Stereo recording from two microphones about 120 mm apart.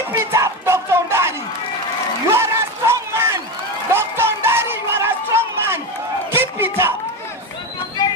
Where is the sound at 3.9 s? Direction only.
20° right (ahead or behind).